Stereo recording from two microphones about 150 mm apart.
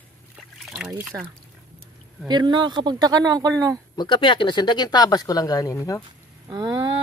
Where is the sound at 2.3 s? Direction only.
30° right (ahead or behind).